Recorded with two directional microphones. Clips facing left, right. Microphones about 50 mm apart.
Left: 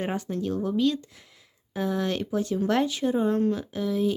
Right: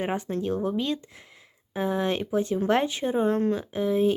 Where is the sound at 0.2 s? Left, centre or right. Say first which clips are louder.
Right 1 dB; right.